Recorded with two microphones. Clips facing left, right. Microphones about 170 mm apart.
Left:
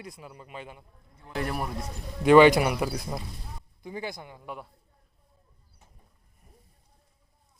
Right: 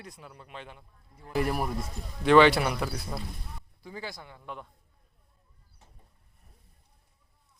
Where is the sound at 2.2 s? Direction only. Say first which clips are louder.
Left 3 dB; 10° left (ahead or behind).